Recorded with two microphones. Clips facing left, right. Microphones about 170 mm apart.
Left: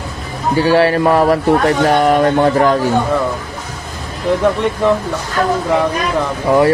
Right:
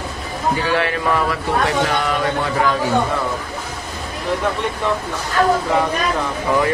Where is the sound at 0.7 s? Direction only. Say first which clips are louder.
Left 11 dB; 35° left (ahead or behind).